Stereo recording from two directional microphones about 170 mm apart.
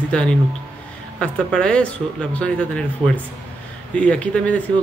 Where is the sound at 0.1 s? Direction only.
5° left (ahead or behind).